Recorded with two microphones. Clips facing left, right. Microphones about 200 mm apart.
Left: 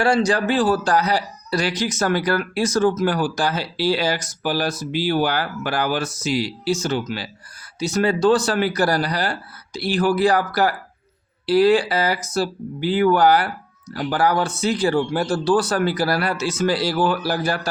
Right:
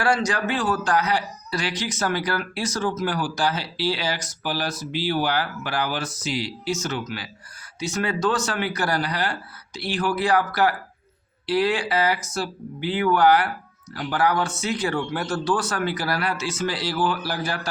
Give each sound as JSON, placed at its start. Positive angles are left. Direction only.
{"t": 0.0, "sound": "speech", "side_deg": 30}